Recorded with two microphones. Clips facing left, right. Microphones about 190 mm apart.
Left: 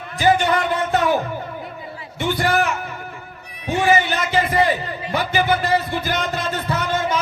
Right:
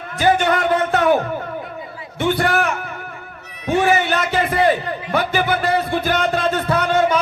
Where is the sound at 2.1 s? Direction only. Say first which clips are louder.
Right 2 dB; 55° right (ahead or behind).